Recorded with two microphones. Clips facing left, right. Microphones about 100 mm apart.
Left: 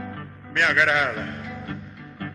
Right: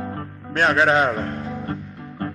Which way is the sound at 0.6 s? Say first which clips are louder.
Right 4 dB; 35° right (ahead or behind).